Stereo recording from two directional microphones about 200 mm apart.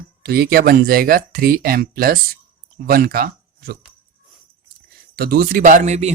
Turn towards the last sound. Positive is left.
turn(degrees=-35)  # may be behind; listen again after turning